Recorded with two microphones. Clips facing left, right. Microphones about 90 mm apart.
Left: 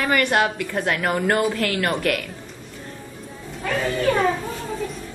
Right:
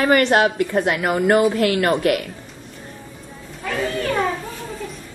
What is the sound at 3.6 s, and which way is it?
Speech, centre (ahead or behind).